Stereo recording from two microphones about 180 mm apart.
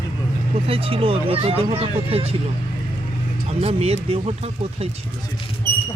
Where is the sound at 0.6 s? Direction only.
30° right (ahead or behind).